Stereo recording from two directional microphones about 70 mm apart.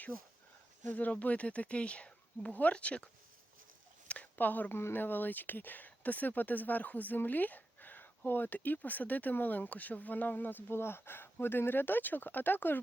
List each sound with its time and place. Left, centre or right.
0.9 s speech: left
4.1 s a sound: left
4.8 s speech: left